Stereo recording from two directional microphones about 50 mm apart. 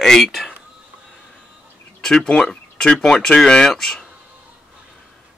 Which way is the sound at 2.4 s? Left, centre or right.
Centre.